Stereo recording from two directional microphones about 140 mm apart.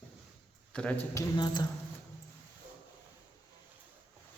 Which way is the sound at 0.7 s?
10° left (ahead or behind).